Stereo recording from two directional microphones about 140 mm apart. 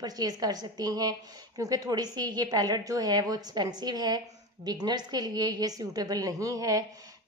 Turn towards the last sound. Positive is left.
turn(degrees=-25)  # may be behind; listen again after turning